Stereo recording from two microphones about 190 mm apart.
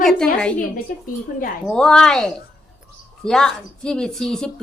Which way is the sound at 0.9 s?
45° left (ahead or behind).